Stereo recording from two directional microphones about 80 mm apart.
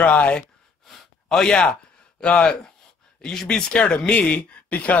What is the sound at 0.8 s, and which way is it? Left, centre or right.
Gasp, centre.